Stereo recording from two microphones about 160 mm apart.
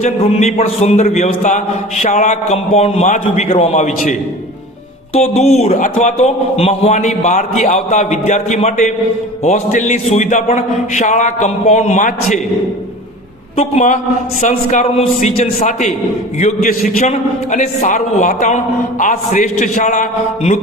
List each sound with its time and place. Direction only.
0.0 s a man's voice: 45° left (ahead or behind)
13.6 s a man's voice: 45° left (ahead or behind)